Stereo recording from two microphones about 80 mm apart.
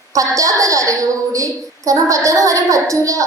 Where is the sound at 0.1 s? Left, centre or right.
Right.